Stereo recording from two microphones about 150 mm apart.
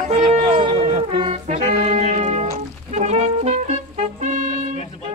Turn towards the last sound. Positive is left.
turn(degrees=-55)  # may be behind; listen again after turning